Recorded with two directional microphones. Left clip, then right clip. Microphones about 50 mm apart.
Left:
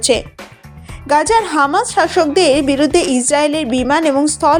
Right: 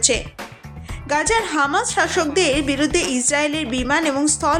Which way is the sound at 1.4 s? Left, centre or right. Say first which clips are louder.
Left 5 dB; left.